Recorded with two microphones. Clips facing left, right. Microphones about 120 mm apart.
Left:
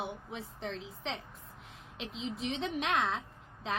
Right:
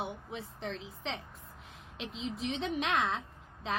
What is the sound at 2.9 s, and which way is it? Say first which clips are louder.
Speech: left 1 dB; 60° right (ahead or behind).